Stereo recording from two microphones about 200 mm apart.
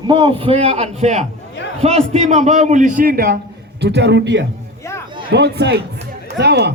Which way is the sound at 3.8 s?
60° right (ahead or behind).